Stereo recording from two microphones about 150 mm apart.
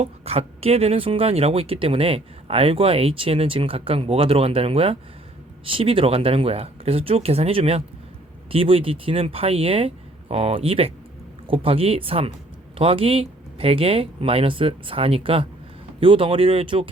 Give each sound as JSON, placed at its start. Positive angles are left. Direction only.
{"t": 0.0, "sound": "speech", "side_deg": -40}